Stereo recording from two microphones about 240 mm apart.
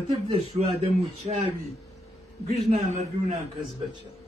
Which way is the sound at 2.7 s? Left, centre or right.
Right.